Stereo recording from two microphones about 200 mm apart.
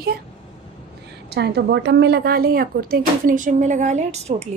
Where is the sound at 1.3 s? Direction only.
55° right (ahead or behind); by 4.5 s 35° right (ahead or behind).